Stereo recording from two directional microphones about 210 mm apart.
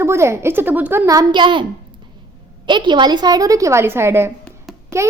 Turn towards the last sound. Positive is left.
turn(degrees=5)  # may be behind; listen again after turning